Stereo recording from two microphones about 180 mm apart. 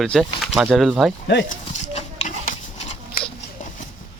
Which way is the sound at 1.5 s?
40° left (ahead or behind).